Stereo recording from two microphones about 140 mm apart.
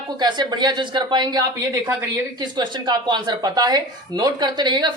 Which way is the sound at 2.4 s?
30° right (ahead or behind).